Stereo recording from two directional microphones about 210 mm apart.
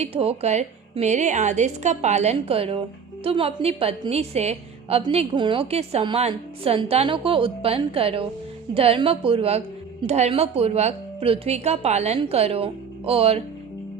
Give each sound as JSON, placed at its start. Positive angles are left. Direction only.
{"t": 0.0, "sound": "a woman's voice", "side_deg": -30}